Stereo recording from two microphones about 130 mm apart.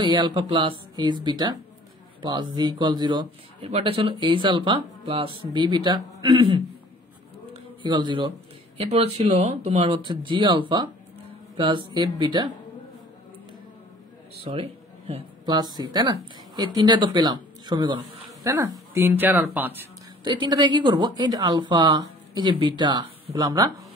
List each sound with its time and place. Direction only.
0.0 s a woman's voice: 35° right (ahead or behind)
3.6 s a woman's voice: 45° right (ahead or behind)
7.5 s a sound: 35° right (ahead or behind)
8.7 s a woman's voice: 50° right (ahead or behind); by 12.4 s 35° right (ahead or behind)
14.4 s a man's voice: 45° right (ahead or behind)
15.4 s speech: 35° right (ahead or behind); by 19.8 s 15° right (ahead or behind)
20.2 s a woman's voice: 35° right (ahead or behind)